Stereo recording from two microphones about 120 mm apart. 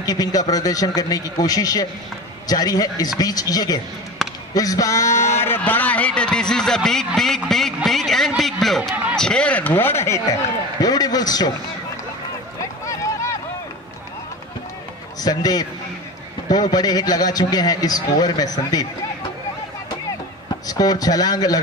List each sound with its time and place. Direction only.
0.0 s a man's voice: 30° left (ahead or behind)
4.2 s basketball bounce: centre (ahead or behind)
4.6 s a man's voice: 30° left (ahead or behind); by 8.3 s centre (ahead or behind)
8.4 s a sound: centre (ahead or behind)
9.1 s a man's voice: 5° left (ahead or behind); by 11.5 s 35° left (ahead or behind)
15.1 s a man's voice: 35° left (ahead or behind)
20.6 s a man's voice: 30° left (ahead or behind)